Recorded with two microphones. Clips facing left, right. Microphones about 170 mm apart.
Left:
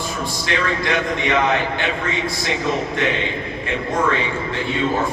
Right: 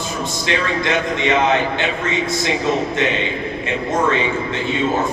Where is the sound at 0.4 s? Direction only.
20° right (ahead or behind).